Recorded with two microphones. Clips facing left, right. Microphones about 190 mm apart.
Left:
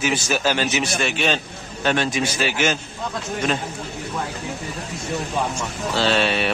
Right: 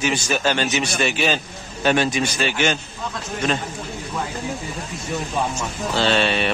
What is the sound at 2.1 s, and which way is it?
Speech, 5° left (ahead or behind).